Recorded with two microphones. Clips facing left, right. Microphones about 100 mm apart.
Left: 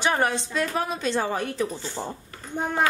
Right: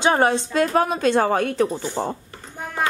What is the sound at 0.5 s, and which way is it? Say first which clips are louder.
A woman's voice: right 7 dB; 50° right (ahead or behind).